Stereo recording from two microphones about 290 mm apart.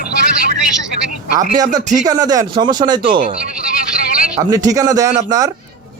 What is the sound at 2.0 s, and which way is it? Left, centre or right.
Speech, centre.